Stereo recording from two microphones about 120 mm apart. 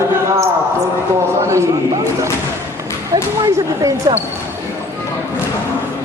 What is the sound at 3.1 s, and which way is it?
Speech, 30° right (ahead or behind).